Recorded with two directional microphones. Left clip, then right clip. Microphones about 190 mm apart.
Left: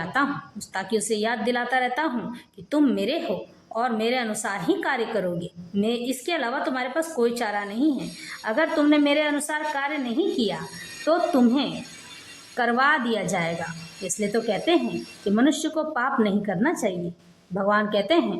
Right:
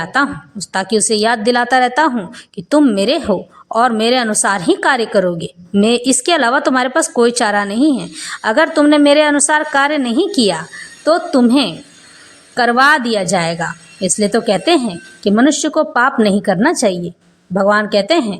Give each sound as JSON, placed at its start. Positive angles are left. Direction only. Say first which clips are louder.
{"t": 0.0, "sound": "a woman's voice", "louder": "right 9 dB", "side_deg": -20}